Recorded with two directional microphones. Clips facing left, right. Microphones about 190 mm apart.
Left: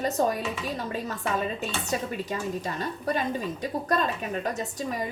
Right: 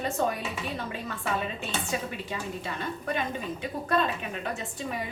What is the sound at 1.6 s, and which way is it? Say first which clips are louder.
A woman's voice: left 2 dB; 40° left (ahead or behind).